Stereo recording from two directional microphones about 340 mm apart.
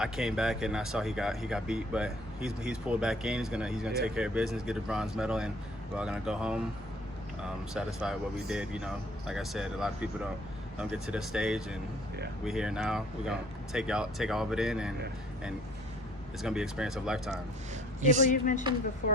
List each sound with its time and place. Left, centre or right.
0.0 s speech: centre
16.4 s speech: centre
18.3 s speech: left